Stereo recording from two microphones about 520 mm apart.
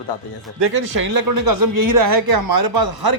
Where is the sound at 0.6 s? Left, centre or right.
Right.